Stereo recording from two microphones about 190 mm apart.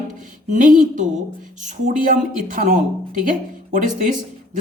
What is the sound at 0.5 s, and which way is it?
Speech, 40° right (ahead or behind).